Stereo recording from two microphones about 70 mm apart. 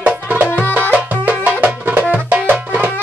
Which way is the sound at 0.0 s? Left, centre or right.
Right.